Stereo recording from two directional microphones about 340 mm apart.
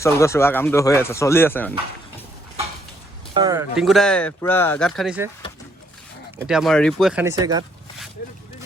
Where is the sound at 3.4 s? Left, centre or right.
Centre.